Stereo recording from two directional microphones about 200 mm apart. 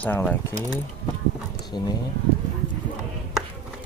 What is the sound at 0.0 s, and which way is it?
Speech, 10° left (ahead or behind).